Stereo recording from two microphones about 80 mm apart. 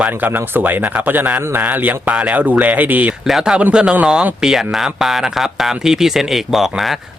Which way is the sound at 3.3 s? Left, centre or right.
Centre.